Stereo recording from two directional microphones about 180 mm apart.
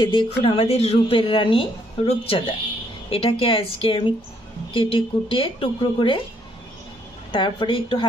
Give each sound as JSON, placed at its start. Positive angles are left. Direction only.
{"t": 0.0, "sound": "a woman's voice", "side_deg": 25}
{"t": 7.3, "sound": "a woman's voice", "side_deg": 25}